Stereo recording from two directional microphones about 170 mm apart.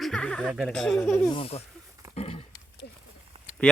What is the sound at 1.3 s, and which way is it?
Speech, 35° left (ahead or behind).